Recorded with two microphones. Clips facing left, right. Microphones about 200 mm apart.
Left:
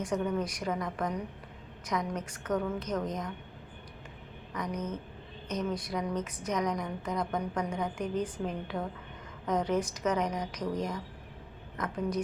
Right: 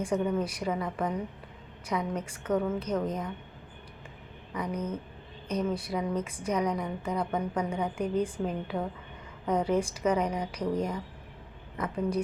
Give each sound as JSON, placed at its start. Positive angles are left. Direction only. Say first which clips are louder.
{"t": 0.0, "sound": "a woman's voice", "louder": "right 3 dB", "side_deg": -10}
{"t": 4.5, "sound": "a woman's voice", "louder": "right 2 dB", "side_deg": -10}
{"t": 11.8, "sound": "a woman's voice", "louder": "right 3 dB", "side_deg": -10}